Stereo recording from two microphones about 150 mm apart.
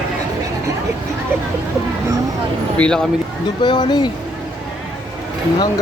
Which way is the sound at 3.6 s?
30° left (ahead or behind).